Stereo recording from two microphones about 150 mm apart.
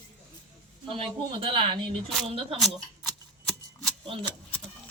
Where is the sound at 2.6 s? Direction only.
5° left (ahead or behind).